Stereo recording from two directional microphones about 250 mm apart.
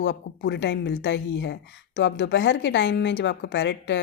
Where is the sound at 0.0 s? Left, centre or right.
Left.